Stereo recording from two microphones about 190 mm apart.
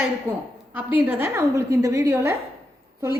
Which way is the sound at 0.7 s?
10° right (ahead or behind).